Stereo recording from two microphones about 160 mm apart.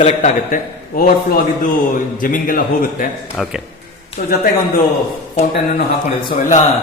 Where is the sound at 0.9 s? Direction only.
65° left (ahead or behind).